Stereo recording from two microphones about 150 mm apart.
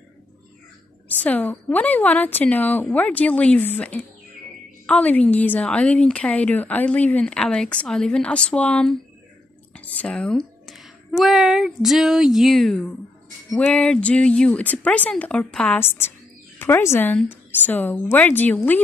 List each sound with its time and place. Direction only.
1.2 s a woman's voice: 10° left (ahead or behind)
10.0 s a woman's voice: 5° left (ahead or behind)